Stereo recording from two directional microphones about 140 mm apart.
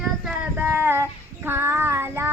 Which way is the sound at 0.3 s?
15° right (ahead or behind).